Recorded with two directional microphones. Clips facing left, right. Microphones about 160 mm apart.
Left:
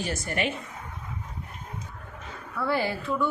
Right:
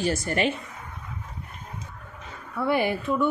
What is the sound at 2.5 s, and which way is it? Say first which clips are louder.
Speech: right 3 dB; 20° right (ahead or behind).